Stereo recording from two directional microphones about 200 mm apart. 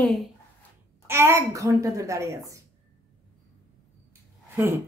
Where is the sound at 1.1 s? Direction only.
10° right (ahead or behind).